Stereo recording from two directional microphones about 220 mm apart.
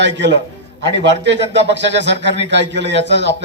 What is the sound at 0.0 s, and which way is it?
A man's voice, 55° right (ahead or behind).